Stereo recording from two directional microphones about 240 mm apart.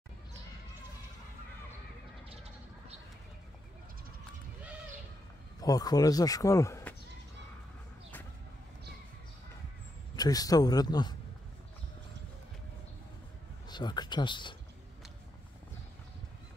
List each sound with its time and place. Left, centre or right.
5.6 s speech: centre
10.1 s a man's voice: centre
13.7 s a man's voice: centre